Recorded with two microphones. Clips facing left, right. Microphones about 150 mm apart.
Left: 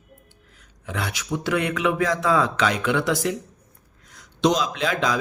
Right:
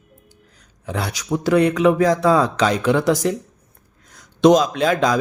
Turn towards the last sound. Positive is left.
turn(degrees=-45)  # may be behind; listen again after turning